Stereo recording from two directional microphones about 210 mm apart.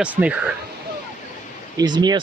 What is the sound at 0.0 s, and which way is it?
Speech, 5° right (ahead or behind).